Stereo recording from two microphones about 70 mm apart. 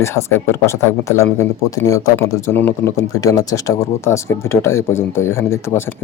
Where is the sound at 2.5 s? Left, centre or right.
Left.